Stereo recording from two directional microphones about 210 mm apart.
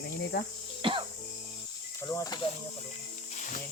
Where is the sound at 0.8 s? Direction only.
25° right (ahead or behind).